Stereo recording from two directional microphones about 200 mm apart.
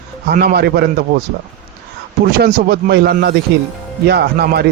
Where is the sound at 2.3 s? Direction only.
50° right (ahead or behind).